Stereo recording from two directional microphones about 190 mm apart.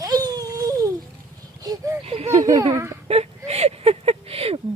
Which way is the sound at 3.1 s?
35° right (ahead or behind).